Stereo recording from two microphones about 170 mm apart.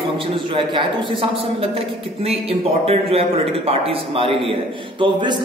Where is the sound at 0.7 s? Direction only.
30° right (ahead or behind).